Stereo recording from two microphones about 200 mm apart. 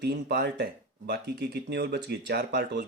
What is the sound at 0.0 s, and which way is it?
Speech, 55° right (ahead or behind).